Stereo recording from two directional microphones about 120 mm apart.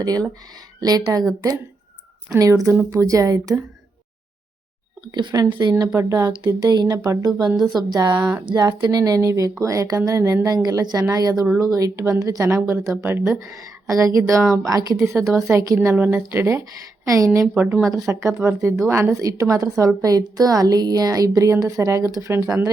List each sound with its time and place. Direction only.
0.0 s speech: 30° right (ahead or behind)
2.3 s a woman's voice: 25° right (ahead or behind)
5.1 s a woman's voice: 35° right (ahead or behind)
13.2 s speech: centre (ahead or behind)
13.5 s a woman's voice: 25° right (ahead or behind)
17.5 s speech: 15° right (ahead or behind)
17.9 s a woman's voice: 25° right (ahead or behind)